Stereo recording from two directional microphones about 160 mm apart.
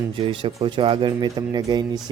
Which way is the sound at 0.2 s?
35° right (ahead or behind).